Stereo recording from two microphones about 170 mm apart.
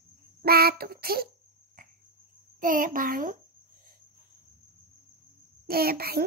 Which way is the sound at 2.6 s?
50° right (ahead or behind).